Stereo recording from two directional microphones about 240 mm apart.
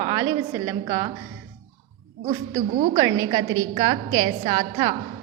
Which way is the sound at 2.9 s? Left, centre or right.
Centre.